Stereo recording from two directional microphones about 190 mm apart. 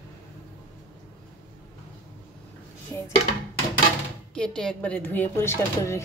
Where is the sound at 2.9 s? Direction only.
15° left (ahead or behind).